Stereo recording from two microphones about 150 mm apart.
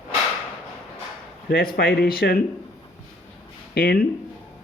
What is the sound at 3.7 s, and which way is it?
Speech, 90° left.